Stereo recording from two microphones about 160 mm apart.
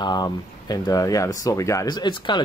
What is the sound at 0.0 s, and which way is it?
Speech, 25° left (ahead or behind).